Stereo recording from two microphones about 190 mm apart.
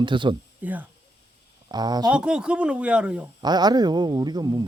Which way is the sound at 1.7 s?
20° right (ahead or behind).